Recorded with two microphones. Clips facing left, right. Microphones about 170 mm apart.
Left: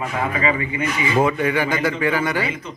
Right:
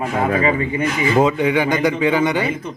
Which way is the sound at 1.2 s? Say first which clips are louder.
Right 3 dB; 20° right (ahead or behind).